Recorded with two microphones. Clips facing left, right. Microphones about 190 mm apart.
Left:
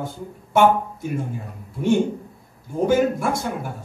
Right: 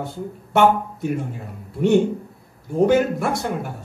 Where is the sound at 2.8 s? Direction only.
60° right (ahead or behind).